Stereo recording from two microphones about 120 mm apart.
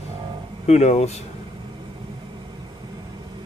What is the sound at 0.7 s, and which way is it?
Speech, 65° left (ahead or behind).